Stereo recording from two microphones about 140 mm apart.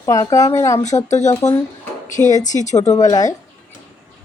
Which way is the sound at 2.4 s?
60° left (ahead or behind).